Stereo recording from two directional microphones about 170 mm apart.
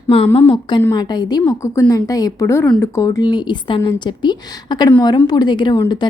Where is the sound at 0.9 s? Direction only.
25° left (ahead or behind).